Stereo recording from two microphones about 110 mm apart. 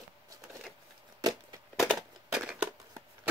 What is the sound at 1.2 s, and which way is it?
Chop, 35° right (ahead or behind).